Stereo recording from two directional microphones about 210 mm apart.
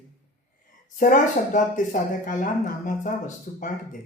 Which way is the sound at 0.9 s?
40° left (ahead or behind).